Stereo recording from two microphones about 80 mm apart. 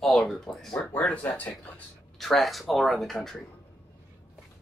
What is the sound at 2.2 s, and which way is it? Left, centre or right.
Speech, centre.